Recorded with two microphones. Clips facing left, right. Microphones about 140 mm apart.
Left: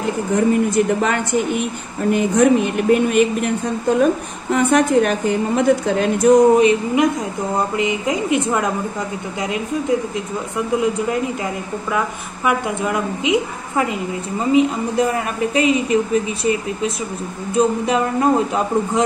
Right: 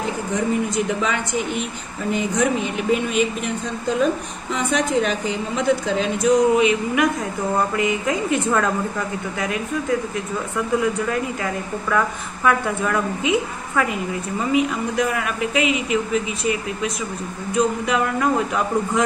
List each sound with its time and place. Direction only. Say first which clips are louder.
0.3 s speech: left 6 dB; 55° left (ahead or behind)
7.5 s a woman's voice: left 1 dB; 20° left (ahead or behind)